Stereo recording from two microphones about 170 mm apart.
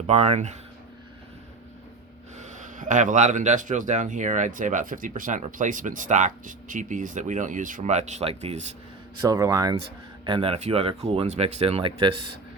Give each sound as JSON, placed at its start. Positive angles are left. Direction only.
{"t": 0.1, "sound": "speech", "side_deg": -40}
{"t": 2.4, "sound": "speech", "side_deg": -45}
{"t": 9.2, "sound": "speech", "side_deg": -20}
{"t": 10.2, "sound": "speech", "side_deg": -30}